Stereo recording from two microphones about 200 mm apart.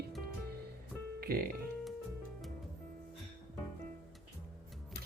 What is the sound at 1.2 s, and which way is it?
Speech, 50° right (ahead or behind).